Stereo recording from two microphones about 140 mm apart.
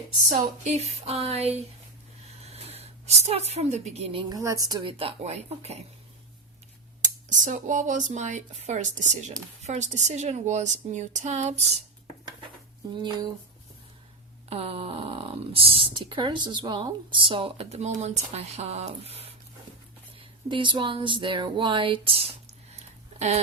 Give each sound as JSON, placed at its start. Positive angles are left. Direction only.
{"t": 0.3, "sound": "speech", "side_deg": -50}
{"t": 2.4, "sound": "a sound", "side_deg": -45}
{"t": 4.3, "sound": "a woman's voice", "side_deg": -25}
{"t": 4.8, "sound": "speech", "side_deg": -40}
{"t": 7.3, "sound": "a woman's voice", "side_deg": -65}
{"t": 12.9, "sound": "a sound", "side_deg": -35}
{"t": 14.5, "sound": "speech", "side_deg": -45}